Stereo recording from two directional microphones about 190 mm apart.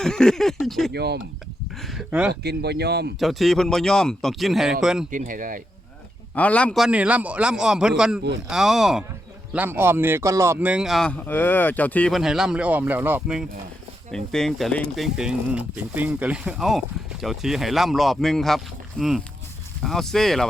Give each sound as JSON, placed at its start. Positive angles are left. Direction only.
{"t": 0.0, "sound": "speech", "side_deg": 5}
{"t": 0.9, "sound": "speech", "side_deg": -60}
{"t": 1.8, "sound": "speech", "side_deg": 0}
{"t": 2.4, "sound": "speech", "side_deg": -60}
{"t": 3.2, "sound": "speech", "side_deg": 0}
{"t": 5.1, "sound": "speech", "side_deg": -45}
{"t": 6.3, "sound": "speech", "side_deg": 5}